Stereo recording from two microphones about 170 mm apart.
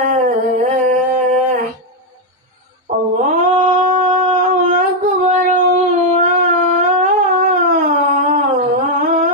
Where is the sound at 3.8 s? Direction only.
40° right (ahead or behind).